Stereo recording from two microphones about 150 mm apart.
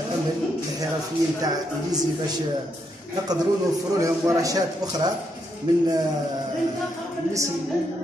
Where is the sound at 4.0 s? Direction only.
20° right (ahead or behind).